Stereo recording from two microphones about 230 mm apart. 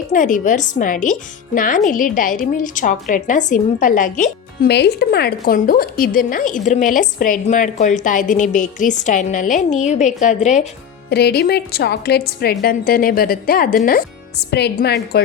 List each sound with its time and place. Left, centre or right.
0.1 s a woman's voice: left
11.1 s a woman's voice: left